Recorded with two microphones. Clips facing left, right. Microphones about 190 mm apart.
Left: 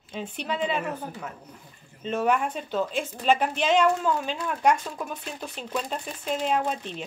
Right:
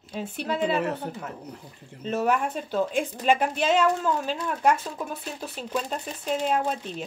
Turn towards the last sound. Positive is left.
turn(degrees=-5)  # may be behind; listen again after turning